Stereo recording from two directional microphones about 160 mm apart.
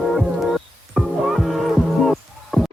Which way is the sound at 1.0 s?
Centre (ahead or behind).